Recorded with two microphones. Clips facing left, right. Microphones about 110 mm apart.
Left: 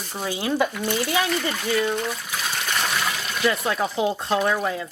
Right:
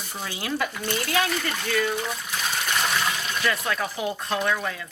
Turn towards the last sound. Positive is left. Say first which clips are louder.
# left 4 dB
turn(degrees=25)  # may be behind; listen again after turning